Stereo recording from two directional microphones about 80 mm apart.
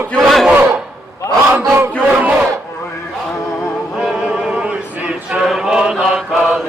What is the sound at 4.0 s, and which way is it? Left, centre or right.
Chant, centre.